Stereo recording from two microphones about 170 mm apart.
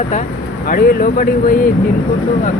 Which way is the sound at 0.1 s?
55° left (ahead or behind).